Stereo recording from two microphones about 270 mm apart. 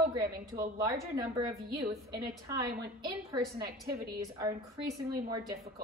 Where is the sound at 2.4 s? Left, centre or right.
Centre.